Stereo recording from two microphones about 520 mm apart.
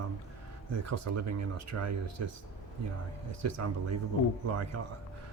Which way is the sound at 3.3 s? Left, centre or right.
Right.